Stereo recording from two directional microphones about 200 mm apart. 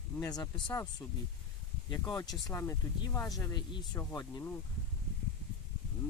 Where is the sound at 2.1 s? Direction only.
15° left (ahead or behind).